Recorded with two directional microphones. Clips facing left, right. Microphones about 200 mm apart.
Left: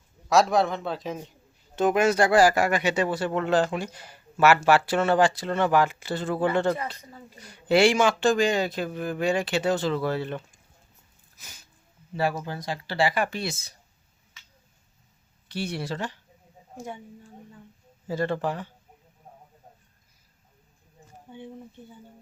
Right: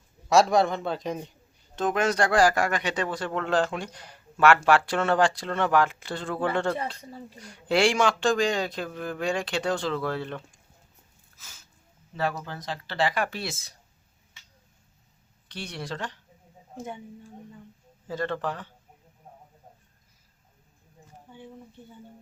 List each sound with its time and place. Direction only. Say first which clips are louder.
0.3 s speech: right 1 dB; centre (ahead or behind)
11.3 s sneeze: left 3 dB; 15° left (ahead or behind)
12.1 s speech: left 3 dB; 10° left (ahead or behind)
15.4 s speech: left 5 dB; 5° left (ahead or behind)
21.3 s speech: left 4 dB; 20° left (ahead or behind)